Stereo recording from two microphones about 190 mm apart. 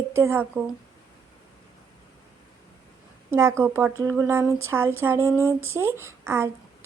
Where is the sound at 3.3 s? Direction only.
15° right (ahead or behind).